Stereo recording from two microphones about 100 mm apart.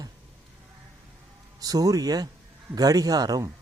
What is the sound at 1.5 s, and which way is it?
A man's voice, 40° right (ahead or behind).